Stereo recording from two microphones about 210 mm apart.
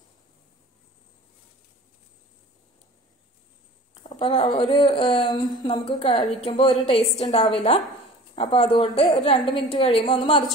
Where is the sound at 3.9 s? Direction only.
25° left (ahead or behind).